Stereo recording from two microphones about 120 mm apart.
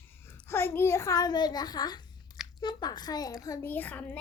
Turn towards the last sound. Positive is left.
turn(degrees=15)  # may be behind; listen again after turning